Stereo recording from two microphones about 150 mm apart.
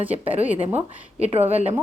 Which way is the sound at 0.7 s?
45° right (ahead or behind).